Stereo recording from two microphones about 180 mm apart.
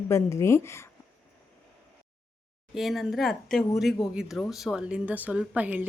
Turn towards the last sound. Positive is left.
turn(degrees=-10)  # may be behind; listen again after turning